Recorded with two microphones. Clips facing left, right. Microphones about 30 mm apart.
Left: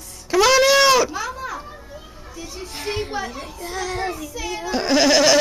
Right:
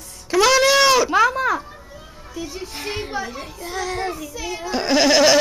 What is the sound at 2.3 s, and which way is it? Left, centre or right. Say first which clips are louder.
A child's voice: right 3 dB; centre.